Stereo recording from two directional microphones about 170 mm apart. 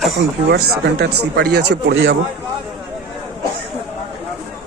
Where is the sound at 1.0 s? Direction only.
75° right (ahead or behind).